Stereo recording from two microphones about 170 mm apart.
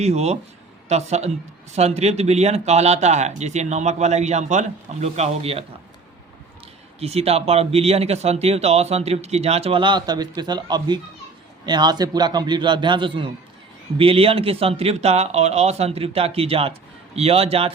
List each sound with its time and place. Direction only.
0.0 s speech: 40° right (ahead or behind)
7.0 s a man's voice: 35° right (ahead or behind)